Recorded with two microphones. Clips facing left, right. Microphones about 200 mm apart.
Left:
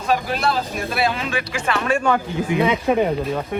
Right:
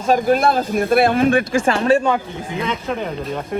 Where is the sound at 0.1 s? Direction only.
50° right (ahead or behind).